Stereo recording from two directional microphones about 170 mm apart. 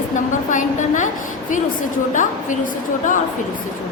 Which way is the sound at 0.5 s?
45° left (ahead or behind).